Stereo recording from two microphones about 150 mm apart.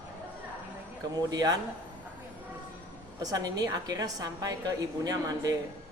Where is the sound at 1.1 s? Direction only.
25° right (ahead or behind).